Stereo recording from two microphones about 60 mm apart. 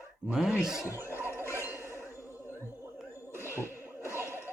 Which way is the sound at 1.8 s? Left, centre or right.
Left.